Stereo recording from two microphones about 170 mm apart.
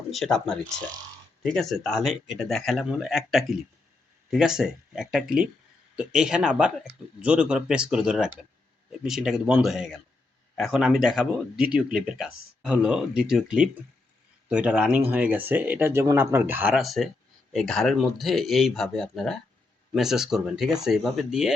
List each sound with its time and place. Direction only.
0.1 s speech: centre (ahead or behind)